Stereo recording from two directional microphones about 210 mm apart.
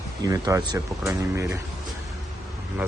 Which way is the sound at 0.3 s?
15° right (ahead or behind).